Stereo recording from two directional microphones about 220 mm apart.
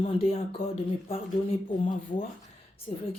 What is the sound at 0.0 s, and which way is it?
A woman's voice, 25° left (ahead or behind).